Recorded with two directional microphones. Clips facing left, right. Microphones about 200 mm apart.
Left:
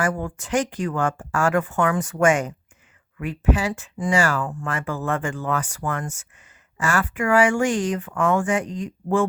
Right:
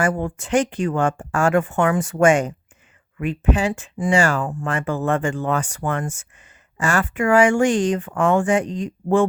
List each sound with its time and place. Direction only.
0.0 s speech: 25° right (ahead or behind)